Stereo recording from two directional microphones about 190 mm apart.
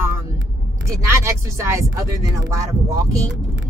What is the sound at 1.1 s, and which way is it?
Speech, 15° right (ahead or behind).